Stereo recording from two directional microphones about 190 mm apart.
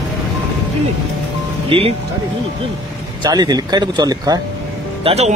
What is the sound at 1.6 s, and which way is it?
Speech, 30° right (ahead or behind).